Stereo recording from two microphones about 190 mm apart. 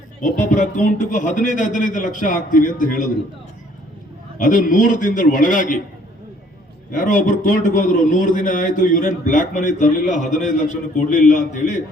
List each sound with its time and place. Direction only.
0.2 s a man's voice: 45° left (ahead or behind)
4.4 s a man's voice: 45° left (ahead or behind)
6.9 s a man's voice: 45° left (ahead or behind)